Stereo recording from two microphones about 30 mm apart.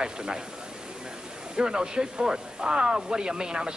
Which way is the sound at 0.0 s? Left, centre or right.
Right.